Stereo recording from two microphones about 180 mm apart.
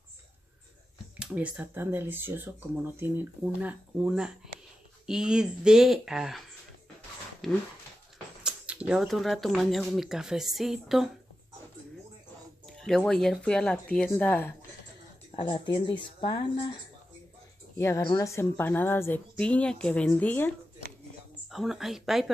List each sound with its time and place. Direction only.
1.2 s speech: 5° right (ahead or behind)
7.4 s speech: centre (ahead or behind)
12.6 s a woman's voice: centre (ahead or behind)
15.3 s speech: 25° left (ahead or behind)
17.7 s a woman's voice: 15° left (ahead or behind)
21.5 s speech: centre (ahead or behind)